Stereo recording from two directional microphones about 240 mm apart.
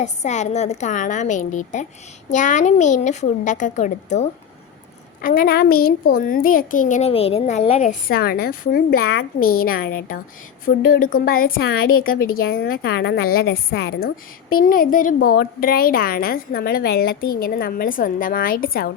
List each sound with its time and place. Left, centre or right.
0.0 s a woman's voice: left